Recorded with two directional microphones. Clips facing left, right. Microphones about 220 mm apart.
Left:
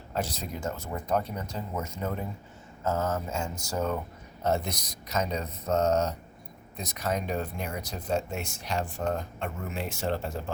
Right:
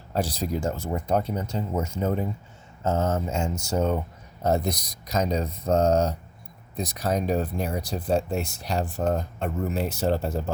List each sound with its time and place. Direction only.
0.1 s speech: 35° right (ahead or behind)